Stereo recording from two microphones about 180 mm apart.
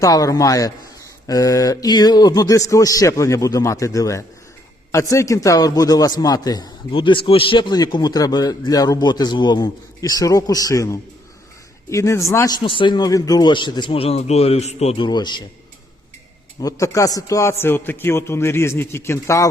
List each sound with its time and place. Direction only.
0.0 s a man's voice: 20° left (ahead or behind)
12.6 s a man's voice: 25° left (ahead or behind)
16.6 s a man's voice: 20° left (ahead or behind)